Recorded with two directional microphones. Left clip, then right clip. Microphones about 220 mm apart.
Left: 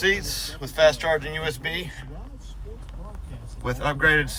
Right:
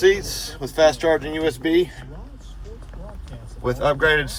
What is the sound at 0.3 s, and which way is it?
Speech, 35° right (ahead or behind).